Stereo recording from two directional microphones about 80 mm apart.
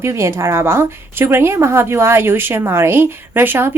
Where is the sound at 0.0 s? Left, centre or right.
Right.